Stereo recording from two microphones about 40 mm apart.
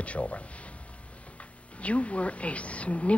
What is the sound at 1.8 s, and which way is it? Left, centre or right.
Speech, left.